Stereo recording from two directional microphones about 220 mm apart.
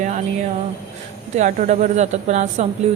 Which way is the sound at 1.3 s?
35° right (ahead or behind).